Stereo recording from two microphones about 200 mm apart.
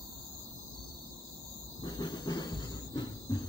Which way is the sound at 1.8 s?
20° left (ahead or behind).